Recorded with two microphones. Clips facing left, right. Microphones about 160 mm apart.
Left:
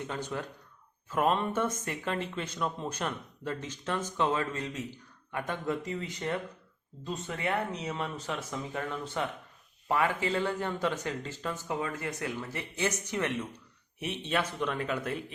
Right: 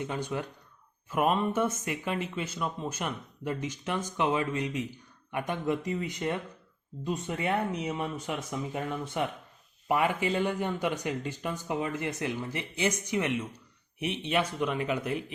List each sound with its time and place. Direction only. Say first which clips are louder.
0.0 s speech: right 3 dB; 15° right (ahead or behind)